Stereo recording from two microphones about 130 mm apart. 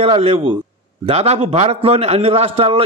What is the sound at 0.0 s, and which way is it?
A man's voice, 50° right (ahead or behind).